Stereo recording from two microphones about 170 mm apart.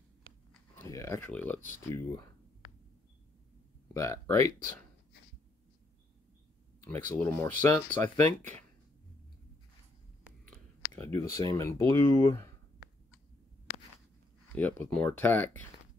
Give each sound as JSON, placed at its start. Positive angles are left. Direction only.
{"t": 0.7, "sound": "speech", "side_deg": 15}
{"t": 3.9, "sound": "speech", "side_deg": 15}
{"t": 6.8, "sound": "speech", "side_deg": 10}
{"t": 10.9, "sound": "speech", "side_deg": 15}
{"t": 14.5, "sound": "speech", "side_deg": 10}